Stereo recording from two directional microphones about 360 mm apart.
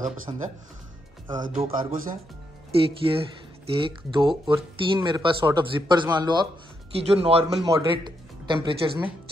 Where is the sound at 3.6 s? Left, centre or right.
Centre.